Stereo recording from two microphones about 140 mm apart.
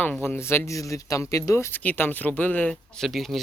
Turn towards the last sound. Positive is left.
turn(degrees=0)  # may be behind; listen again after turning